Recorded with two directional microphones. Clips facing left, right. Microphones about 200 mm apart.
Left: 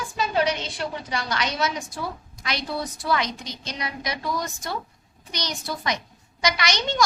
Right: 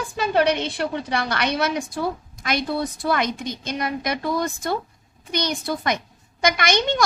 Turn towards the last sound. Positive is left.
turn(degrees=-55)  # may be behind; listen again after turning